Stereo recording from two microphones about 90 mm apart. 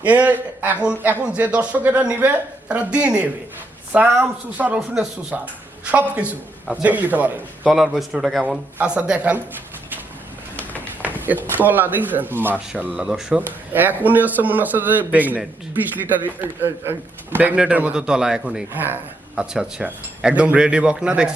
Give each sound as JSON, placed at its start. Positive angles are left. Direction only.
{"t": 0.0, "sound": "speech", "side_deg": -15}
{"t": 7.7, "sound": "a man's voice", "side_deg": -5}
{"t": 11.0, "sound": "a sound", "side_deg": -20}
{"t": 11.5, "sound": "a man's voice", "side_deg": -20}
{"t": 13.4, "sound": "a man's voice", "side_deg": -20}
{"t": 18.7, "sound": "a man's voice", "side_deg": -20}
{"t": 19.4, "sound": "speech", "side_deg": -10}